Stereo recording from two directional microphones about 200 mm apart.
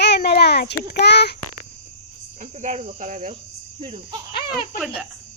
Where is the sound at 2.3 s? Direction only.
35° right (ahead or behind).